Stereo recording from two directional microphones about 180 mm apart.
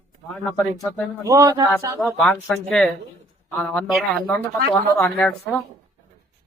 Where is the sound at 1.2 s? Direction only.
15° right (ahead or behind).